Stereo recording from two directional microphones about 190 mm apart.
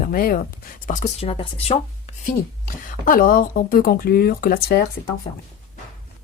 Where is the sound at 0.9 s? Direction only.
40° left (ahead or behind).